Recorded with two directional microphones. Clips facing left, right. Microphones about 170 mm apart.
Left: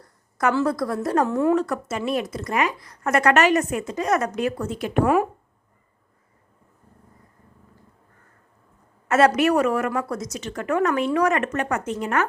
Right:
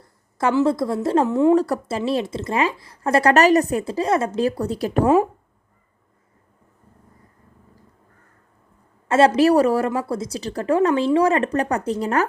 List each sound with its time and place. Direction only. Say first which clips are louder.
0.0 s a sound: right 1 dB; 25° right (ahead or behind)
0.5 s a woman's voice: right 4 dB; 25° right (ahead or behind)
1.5 s speech: right 4 dB; 35° right (ahead or behind)
9.0 s speech: right 3 dB; 30° right (ahead or behind)